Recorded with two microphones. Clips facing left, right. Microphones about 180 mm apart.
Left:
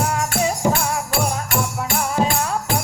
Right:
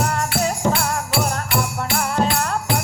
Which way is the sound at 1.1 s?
45° left (ahead or behind).